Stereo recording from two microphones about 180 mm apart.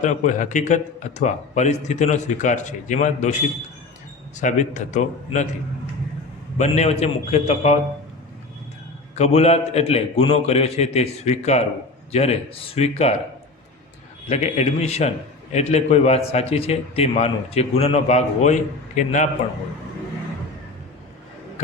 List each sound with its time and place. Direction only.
0.0 s a man's voice: 40° left (ahead or behind)
4.4 s a man's voice: 45° left (ahead or behind)
6.6 s a man's voice: 40° left (ahead or behind)
9.1 s a man's voice: 35° left (ahead or behind)
14.3 s a man's voice: 40° left (ahead or behind)